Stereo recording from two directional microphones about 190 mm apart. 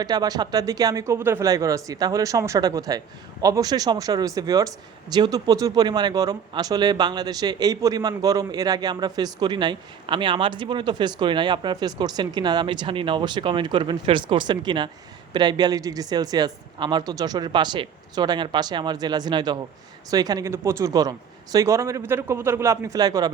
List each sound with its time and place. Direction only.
0.0 s speech: 20° right (ahead or behind)